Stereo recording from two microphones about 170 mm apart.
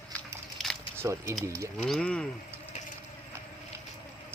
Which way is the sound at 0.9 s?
15° right (ahead or behind).